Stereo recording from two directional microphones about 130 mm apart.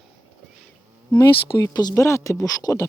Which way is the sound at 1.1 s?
30° left (ahead or behind).